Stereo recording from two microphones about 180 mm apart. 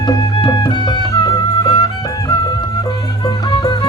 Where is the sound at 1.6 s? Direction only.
20° left (ahead or behind).